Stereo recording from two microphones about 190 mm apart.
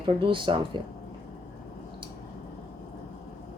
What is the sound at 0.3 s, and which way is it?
Speech, 25° right (ahead or behind).